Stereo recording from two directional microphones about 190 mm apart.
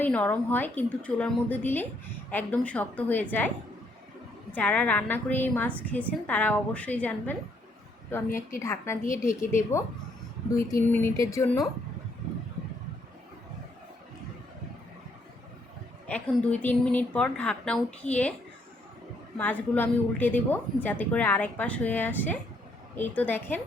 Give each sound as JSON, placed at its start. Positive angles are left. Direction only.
{"t": 0.0, "sound": "a woman's voice", "side_deg": 10}
{"t": 4.5, "sound": "a woman's voice", "side_deg": 5}
{"t": 16.0, "sound": "a woman's voice", "side_deg": 5}
{"t": 19.4, "sound": "a woman's voice", "side_deg": 10}